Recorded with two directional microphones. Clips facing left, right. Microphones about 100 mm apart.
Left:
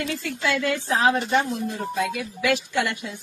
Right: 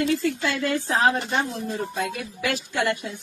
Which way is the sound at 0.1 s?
35° right (ahead or behind).